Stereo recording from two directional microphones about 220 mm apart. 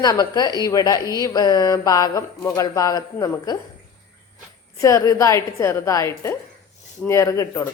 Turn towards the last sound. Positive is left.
turn(degrees=15)  # may be behind; listen again after turning